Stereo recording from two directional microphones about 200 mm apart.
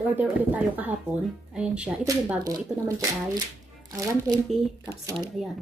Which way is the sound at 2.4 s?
20° right (ahead or behind).